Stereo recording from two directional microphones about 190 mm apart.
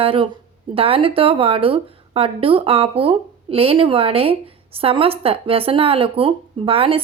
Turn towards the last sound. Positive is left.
turn(degrees=-30)  # may be behind; listen again after turning